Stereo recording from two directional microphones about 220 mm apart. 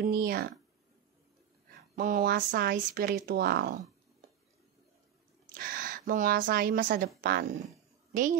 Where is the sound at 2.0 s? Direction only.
40° right (ahead or behind).